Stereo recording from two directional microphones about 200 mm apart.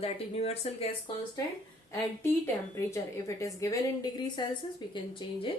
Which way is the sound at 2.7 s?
15° left (ahead or behind).